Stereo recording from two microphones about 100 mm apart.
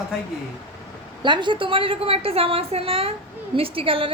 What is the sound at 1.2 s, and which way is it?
A woman's voice, 50° right (ahead or behind).